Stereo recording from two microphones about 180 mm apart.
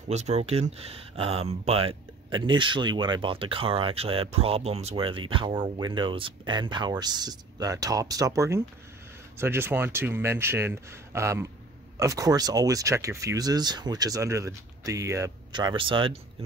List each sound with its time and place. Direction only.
0.1 s speech: 40° right (ahead or behind)